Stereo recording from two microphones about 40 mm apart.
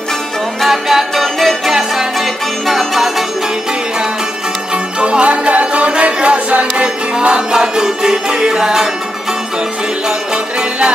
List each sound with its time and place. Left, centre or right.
0.7 s music: centre
1.7 s music: centre
2.1 s music: centre
5.0 s music: right; by 8.8 s centre
10.0 s music: right